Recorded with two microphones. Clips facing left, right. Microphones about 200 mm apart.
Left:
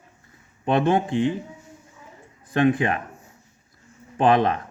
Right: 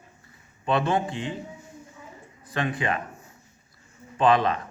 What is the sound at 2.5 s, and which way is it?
Speech, 50° left (ahead or behind).